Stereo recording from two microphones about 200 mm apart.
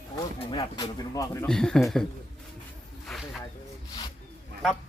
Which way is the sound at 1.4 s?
5° left (ahead or behind).